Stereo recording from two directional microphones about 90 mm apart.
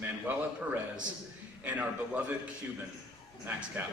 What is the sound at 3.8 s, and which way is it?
Speech, 20° right (ahead or behind).